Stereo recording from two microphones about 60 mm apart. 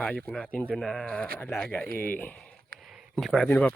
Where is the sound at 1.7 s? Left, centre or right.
Left.